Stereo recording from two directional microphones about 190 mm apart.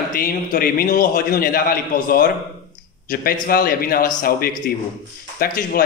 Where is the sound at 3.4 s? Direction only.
50° left (ahead or behind).